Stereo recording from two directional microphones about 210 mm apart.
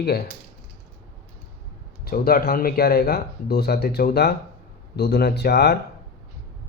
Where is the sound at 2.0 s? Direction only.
45° left (ahead or behind).